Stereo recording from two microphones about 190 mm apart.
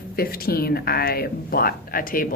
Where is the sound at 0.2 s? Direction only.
55° left (ahead or behind).